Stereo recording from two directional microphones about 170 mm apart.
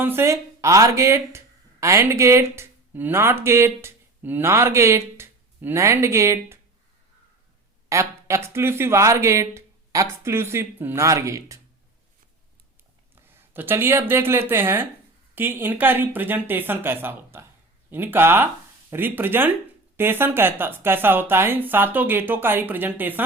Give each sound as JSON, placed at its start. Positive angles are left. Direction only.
{"t": 0.0, "sound": "speech", "side_deg": -15}
{"t": 7.9, "sound": "speech", "side_deg": -15}
{"t": 13.2, "sound": "a sound", "side_deg": -10}
{"t": 14.1, "sound": "speech", "side_deg": -15}